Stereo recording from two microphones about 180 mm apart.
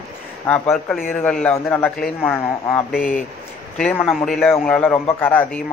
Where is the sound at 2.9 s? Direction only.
50° left (ahead or behind).